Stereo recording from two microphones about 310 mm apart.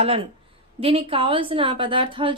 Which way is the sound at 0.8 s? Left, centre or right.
Centre.